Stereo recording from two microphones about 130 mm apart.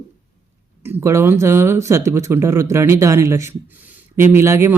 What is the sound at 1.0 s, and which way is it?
A man's voice, 20° right (ahead or behind).